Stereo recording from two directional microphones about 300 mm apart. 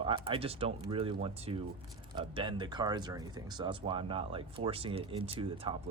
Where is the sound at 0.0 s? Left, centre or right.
Centre.